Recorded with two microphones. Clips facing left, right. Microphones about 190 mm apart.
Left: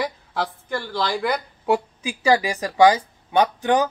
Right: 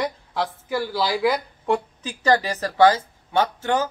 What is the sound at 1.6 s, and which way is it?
Speech, 10° left (ahead or behind).